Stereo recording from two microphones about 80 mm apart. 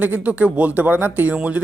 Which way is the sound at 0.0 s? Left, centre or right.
Centre.